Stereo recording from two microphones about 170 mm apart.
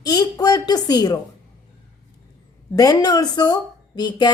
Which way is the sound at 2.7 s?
20° left (ahead or behind).